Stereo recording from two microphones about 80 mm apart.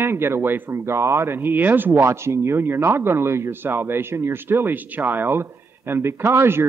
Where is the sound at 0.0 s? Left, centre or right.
Right.